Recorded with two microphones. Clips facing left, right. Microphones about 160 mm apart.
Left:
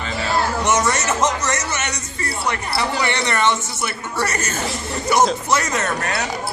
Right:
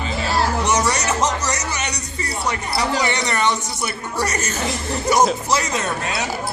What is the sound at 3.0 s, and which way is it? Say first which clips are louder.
Speech: left 1 dB; 15° right (ahead or behind).